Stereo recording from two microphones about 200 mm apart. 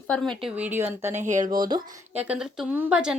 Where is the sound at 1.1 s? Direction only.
35° right (ahead or behind).